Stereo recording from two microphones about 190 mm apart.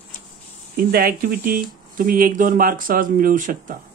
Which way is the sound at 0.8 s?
50° right (ahead or behind).